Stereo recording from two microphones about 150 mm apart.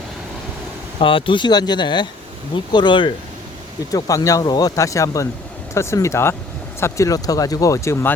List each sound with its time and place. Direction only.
0.9 s speech: 35° left (ahead or behind); by 8.1 s 20° left (ahead or behind)